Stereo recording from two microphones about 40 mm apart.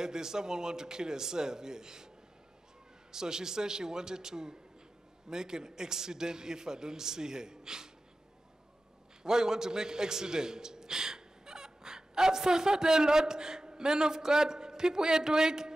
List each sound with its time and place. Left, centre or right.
0.0 s a man's voice: centre
3.1 s a man's voice: centre
9.2 s a man's voice: centre